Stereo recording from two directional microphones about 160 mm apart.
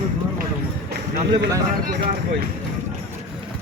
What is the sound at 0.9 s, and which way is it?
Run, 85° right.